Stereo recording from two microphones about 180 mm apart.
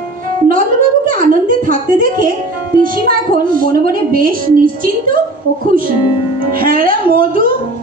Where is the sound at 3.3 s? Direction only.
50° right (ahead or behind).